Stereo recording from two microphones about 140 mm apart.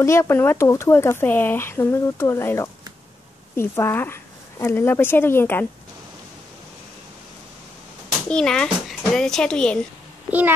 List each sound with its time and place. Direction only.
0.0 s speech: 20° left (ahead or behind)
8.3 s a child's voice: 5° left (ahead or behind)